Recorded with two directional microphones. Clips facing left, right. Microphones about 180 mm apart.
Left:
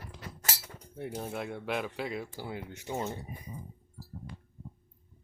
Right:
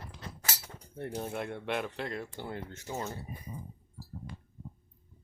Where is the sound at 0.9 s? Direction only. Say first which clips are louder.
Right 1 dB; 5° left (ahead or behind).